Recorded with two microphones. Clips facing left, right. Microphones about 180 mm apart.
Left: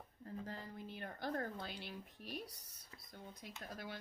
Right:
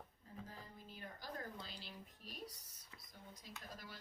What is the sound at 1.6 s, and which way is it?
A woman's voice, 60° left (ahead or behind).